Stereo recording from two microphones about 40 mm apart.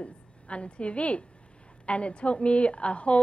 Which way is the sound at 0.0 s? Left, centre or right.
Left.